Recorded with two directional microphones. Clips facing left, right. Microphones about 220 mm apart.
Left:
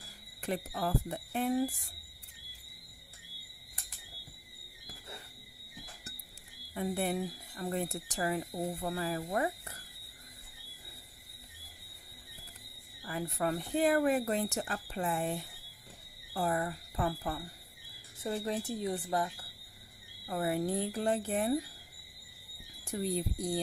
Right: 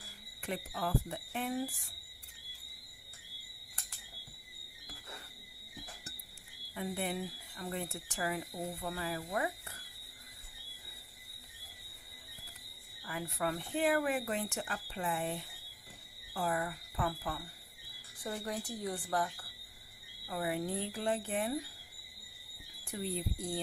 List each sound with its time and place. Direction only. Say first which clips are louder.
0.4 s speech: left 3 dB; 40° left (ahead or behind)
6.7 s speech: left 4 dB; 40° left (ahead or behind)
13.0 s speech: left 3 dB; 35° left (ahead or behind)
18.2 s a woman's voice: left 5 dB; 25° left (ahead or behind)
20.2 s speech: left 4 dB; 40° left (ahead or behind)
22.9 s speech: left 4 dB; 40° left (ahead or behind)